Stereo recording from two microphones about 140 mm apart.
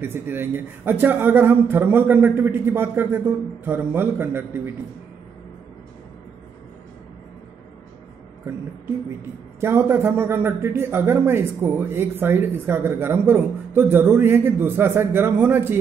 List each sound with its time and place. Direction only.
0.0 s a man's voice: 15° right (ahead or behind)
9.6 s a man's voice: 20° right (ahead or behind)